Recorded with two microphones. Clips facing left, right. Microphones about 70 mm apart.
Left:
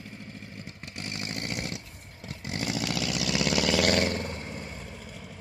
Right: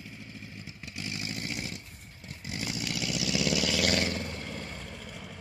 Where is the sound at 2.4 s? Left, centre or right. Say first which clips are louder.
Left 5 dB; left.